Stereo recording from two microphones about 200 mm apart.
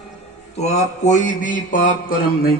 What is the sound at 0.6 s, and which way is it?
A man's voice, 35° left (ahead or behind).